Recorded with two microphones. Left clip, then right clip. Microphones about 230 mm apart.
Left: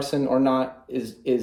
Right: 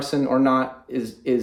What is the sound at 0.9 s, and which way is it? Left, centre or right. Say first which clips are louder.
Speech: right 2 dB; centre.